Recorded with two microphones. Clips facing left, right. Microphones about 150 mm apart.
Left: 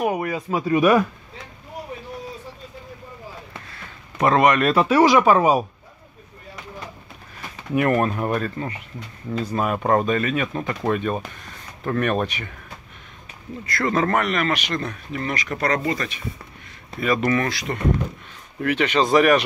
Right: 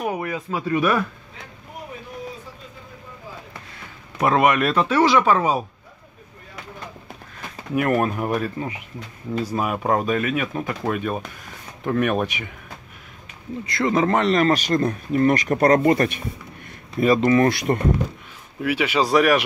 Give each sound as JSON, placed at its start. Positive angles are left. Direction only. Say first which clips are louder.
{"t": 0.3, "sound": "speech", "louder": "left 2 dB", "side_deg": 15}
{"t": 4.2, "sound": "speech", "louder": "left 1 dB", "side_deg": -5}
{"t": 4.7, "sound": "speech", "louder": "left 2 dB", "side_deg": 10}
{"t": 7.7, "sound": "speech", "louder": "left 1 dB", "side_deg": -5}
{"t": 13.7, "sound": "speech", "louder": "right 1 dB", "side_deg": -15}
{"t": 17.0, "sound": "speech", "louder": "right 5 dB", "side_deg": -30}
{"t": 17.5, "sound": "speech", "louder": "right 7 dB", "side_deg": -55}
{"t": 18.6, "sound": "speech", "louder": "left 1 dB", "side_deg": -5}